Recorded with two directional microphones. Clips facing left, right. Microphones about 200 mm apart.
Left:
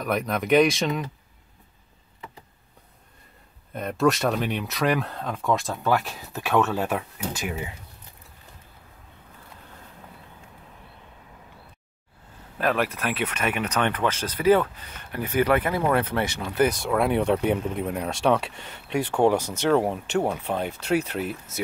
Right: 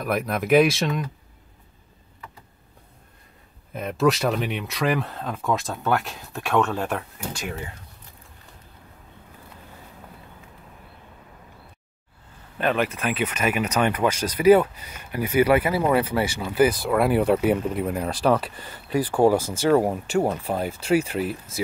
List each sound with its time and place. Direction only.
0.0 s speech: 5° right (ahead or behind)
3.7 s speech: centre (ahead or behind)
12.5 s speech: centre (ahead or behind)